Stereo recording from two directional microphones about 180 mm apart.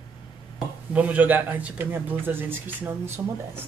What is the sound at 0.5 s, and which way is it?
Speech, 10° right (ahead or behind).